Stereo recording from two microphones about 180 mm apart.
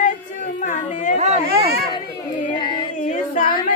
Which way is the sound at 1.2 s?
35° right (ahead or behind).